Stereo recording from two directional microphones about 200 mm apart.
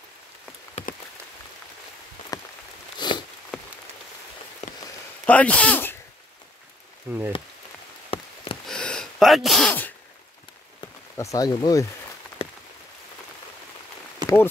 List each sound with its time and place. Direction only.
2.3 s rain on surface: 20° left (ahead or behind)
3.0 s sniff: 20° left (ahead or behind)
3.5 s rain on surface: 5° left (ahead or behind)
4.6 s a sound: 30° left (ahead or behind)
5.2 s a man's voice: 5° left (ahead or behind)
7.1 s speech: 10° right (ahead or behind)
8.1 s wood: 25° left (ahead or behind)
8.6 s gasp: 5° left (ahead or behind)
10.8 s speech: 15° left (ahead or behind)
12.4 s a sound: 30° left (ahead or behind)
14.2 s speech: 10° left (ahead or behind)